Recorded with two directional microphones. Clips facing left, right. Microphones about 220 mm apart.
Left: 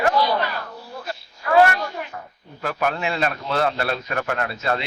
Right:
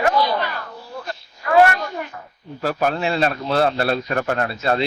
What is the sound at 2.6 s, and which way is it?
Speech, 35° right (ahead or behind).